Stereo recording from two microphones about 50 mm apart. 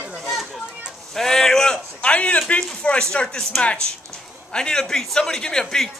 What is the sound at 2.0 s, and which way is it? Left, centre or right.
A man's voice, left.